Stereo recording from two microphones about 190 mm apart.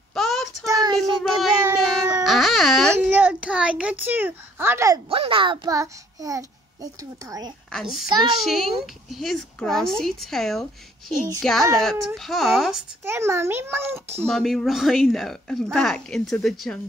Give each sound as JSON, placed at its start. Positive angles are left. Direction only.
{"t": 0.1, "sound": "child singing", "side_deg": 0}
{"t": 0.7, "sound": "child singing", "side_deg": -20}
{"t": 1.6, "sound": "baby cry", "side_deg": -10}
{"t": 3.0, "sound": "a sound", "side_deg": -5}
{"t": 5.1, "sound": "a child's voice", "side_deg": -30}
{"t": 7.7, "sound": "speech", "side_deg": 0}
{"t": 13.0, "sound": "a child's voice", "side_deg": -15}
{"t": 14.3, "sound": "speech", "side_deg": 0}